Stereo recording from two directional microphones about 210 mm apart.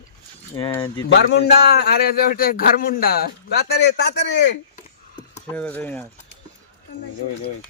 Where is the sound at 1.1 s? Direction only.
55° left (ahead or behind).